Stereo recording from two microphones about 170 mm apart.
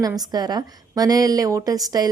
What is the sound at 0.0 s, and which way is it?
A woman's voice, 20° right (ahead or behind).